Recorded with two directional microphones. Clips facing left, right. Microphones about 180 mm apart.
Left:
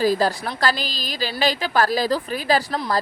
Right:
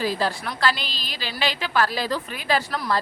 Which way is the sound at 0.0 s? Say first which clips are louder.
Left 5 dB; 40° left (ahead or behind).